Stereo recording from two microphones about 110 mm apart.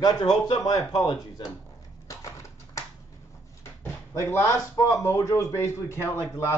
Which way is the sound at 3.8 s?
25° left (ahead or behind).